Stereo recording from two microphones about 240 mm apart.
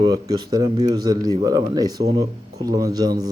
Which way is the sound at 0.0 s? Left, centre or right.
Centre.